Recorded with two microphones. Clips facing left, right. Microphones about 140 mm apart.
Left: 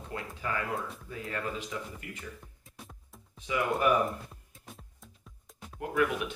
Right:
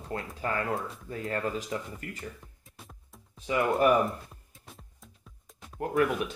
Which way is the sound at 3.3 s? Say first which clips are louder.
Right 4 dB; 35° right (ahead or behind).